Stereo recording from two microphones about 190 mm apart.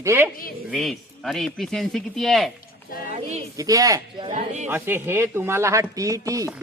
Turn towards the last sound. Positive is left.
turn(degrees=-15)  # may be behind; listen again after turning